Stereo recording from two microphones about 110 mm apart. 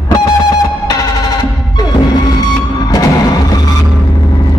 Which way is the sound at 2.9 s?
35° left (ahead or behind).